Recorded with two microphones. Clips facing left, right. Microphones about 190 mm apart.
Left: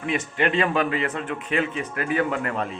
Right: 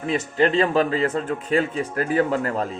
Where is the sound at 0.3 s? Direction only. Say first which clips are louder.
Right 4 dB; 35° right (ahead or behind).